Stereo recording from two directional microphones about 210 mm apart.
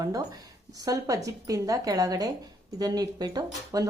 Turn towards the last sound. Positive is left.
turn(degrees=-15)  # may be behind; listen again after turning